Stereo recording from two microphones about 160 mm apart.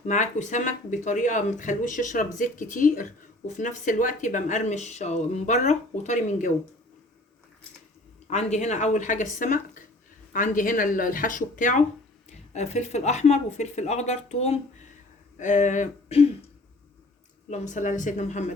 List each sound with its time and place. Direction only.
0.0 s speech: 50° left (ahead or behind)
8.3 s speech: 45° left (ahead or behind)
17.5 s speech: 50° left (ahead or behind)